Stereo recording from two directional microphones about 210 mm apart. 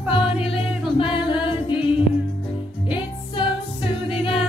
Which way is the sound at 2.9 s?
25° left (ahead or behind).